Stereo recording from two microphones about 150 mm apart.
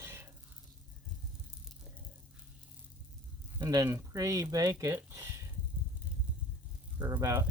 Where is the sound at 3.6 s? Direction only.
20° right (ahead or behind).